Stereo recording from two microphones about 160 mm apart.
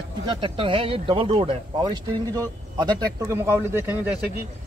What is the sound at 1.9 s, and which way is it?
Speech, 25° right (ahead or behind).